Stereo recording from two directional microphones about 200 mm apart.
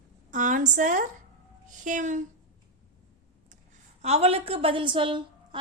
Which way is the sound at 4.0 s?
30° right (ahead or behind).